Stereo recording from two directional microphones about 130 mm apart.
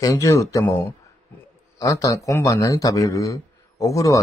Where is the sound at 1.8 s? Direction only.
25° left (ahead or behind).